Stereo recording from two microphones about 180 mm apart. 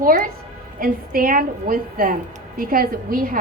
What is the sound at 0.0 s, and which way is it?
A woman's voice, 50° right (ahead or behind).